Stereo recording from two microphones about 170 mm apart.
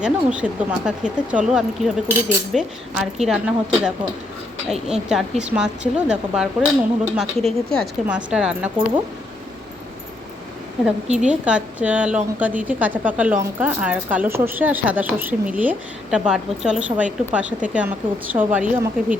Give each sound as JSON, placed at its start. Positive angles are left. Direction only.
{"t": 0.0, "sound": "speech", "side_deg": -5}
{"t": 11.2, "sound": "speech", "side_deg": -5}